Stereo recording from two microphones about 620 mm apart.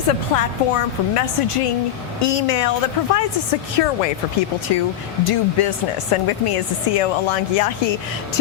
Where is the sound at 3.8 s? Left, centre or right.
Left.